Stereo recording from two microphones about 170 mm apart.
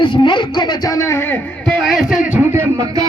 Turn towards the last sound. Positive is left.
turn(degrees=-20)  # may be behind; listen again after turning